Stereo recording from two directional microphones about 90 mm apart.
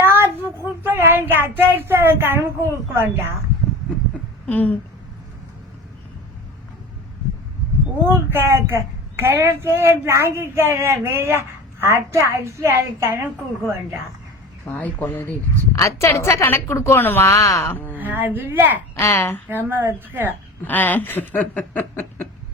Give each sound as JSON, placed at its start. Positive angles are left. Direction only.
{"t": 0.0, "sound": "child singing", "side_deg": -25}
{"t": 1.7, "sound": "speech", "side_deg": -25}
{"t": 4.4, "sound": "a sound", "side_deg": 20}
{"t": 8.0, "sound": "speech", "side_deg": -25}
{"t": 14.7, "sound": "a woman's voice", "side_deg": 20}
{"t": 15.7, "sound": "a woman's voice", "side_deg": 35}
{"t": 17.3, "sound": "speech", "side_deg": 35}
{"t": 17.7, "sound": "a woman's voice", "side_deg": 20}
{"t": 17.9, "sound": "speech", "side_deg": -20}
{"t": 18.9, "sound": "a woman's voice", "side_deg": 30}
{"t": 19.5, "sound": "speech", "side_deg": -25}
{"t": 20.7, "sound": "a woman's voice", "side_deg": 20}